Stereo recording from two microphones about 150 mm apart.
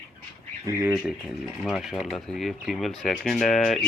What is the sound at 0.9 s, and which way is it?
Speech, 5° right (ahead or behind).